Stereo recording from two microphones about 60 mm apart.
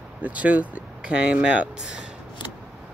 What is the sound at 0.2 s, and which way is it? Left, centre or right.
Speech, right.